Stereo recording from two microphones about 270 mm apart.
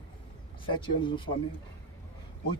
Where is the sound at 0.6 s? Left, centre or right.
Centre.